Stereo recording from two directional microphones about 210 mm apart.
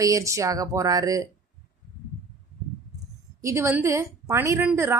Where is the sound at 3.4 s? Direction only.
15° right (ahead or behind).